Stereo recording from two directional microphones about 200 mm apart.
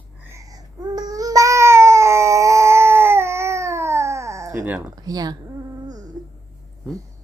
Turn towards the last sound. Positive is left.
turn(degrees=-20)  # may be behind; listen again after turning